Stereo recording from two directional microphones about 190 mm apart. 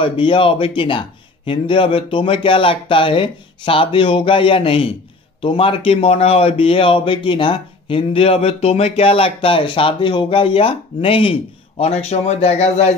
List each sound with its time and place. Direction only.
0.0 s a man's voice: 25° left (ahead or behind)